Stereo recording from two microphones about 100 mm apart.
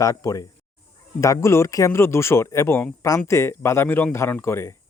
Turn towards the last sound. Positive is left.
turn(degrees=25)  # may be behind; listen again after turning